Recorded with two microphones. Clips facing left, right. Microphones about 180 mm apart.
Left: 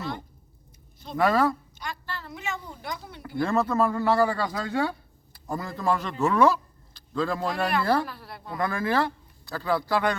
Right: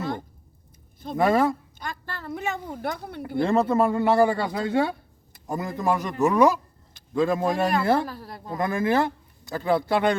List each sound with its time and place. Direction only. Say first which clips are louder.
1.1 s a man's voice: right 2 dB; 25° right (ahead or behind)
1.8 s a sound: right 1 dB; 50° right (ahead or behind)
3.3 s a man's voice: right 3 dB; 25° right (ahead or behind)
8.0 s a woman's voice: right 3 dB; 40° right (ahead or behind)
8.5 s a man's voice: right 3 dB; 20° right (ahead or behind)